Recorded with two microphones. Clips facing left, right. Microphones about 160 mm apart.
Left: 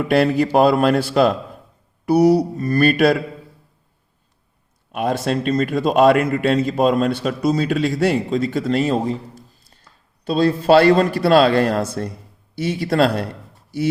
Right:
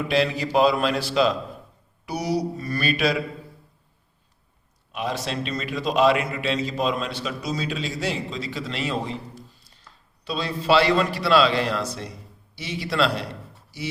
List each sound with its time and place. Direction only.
0.1 s a man's voice: 55° left (ahead or behind)
4.9 s a man's voice: 55° left (ahead or behind)